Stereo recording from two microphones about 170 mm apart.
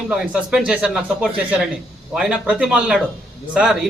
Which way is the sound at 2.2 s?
5° right (ahead or behind).